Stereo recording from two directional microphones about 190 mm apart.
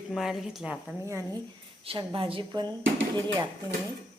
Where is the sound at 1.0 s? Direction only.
15° right (ahead or behind).